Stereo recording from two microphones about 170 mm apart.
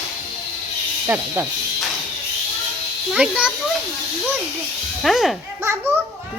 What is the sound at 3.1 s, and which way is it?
Speech, 5° right (ahead or behind).